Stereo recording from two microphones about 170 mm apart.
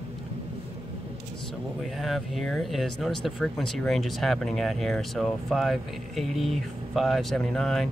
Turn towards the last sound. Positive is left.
turn(degrees=5)  # may be behind; listen again after turning